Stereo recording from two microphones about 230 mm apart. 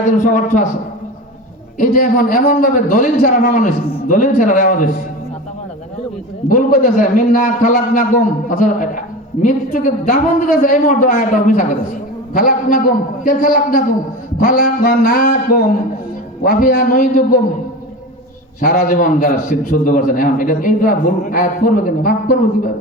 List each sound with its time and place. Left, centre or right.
0.2 s a man's voice: left
1.8 s a man's voice: left
6.5 s a man's voice: left
18.6 s a man's voice: left